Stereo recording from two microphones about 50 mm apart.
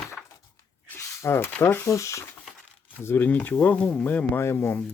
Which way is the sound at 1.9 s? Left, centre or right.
Left.